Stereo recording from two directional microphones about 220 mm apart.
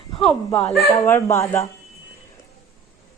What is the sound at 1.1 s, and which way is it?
Speech, 10° left (ahead or behind).